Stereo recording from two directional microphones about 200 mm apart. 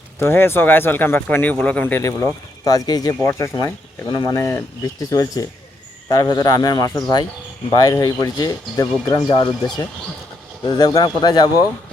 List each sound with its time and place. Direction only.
0.2 s speech: 10° left (ahead or behind)
10.7 s speech: 20° left (ahead or behind)